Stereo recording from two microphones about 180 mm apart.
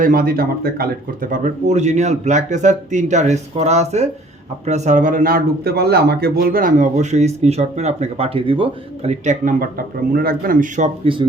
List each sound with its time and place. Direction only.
0.0 s speech: 55° right (ahead or behind); by 11.3 s 30° right (ahead or behind)